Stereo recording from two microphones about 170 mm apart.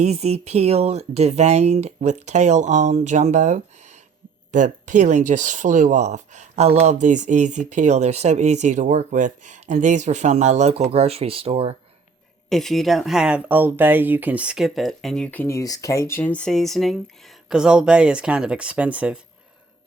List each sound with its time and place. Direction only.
0.0 s speech: 40° right (ahead or behind)
12.5 s speech: centre (ahead or behind)